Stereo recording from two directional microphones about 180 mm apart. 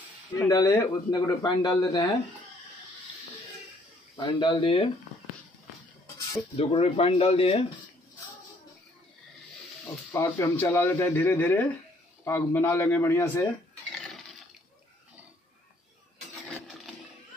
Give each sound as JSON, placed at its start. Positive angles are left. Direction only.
{"t": 0.4, "sound": "speech", "side_deg": 20}
{"t": 4.2, "sound": "speech", "side_deg": 25}
{"t": 6.5, "sound": "speech", "side_deg": 35}
{"t": 10.1, "sound": "speech", "side_deg": 10}
{"t": 13.9, "sound": "toilet flush", "side_deg": 0}
{"t": 16.4, "sound": "a sound", "side_deg": 0}